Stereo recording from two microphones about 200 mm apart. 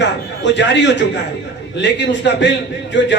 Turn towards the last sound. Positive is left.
turn(degrees=65)  # may be behind; listen again after turning